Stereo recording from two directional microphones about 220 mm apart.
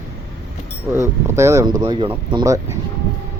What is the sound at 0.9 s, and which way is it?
Speech, 15° right (ahead or behind).